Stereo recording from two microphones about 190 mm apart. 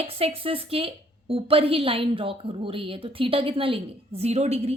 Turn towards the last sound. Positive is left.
turn(degrees=-35)  # may be behind; listen again after turning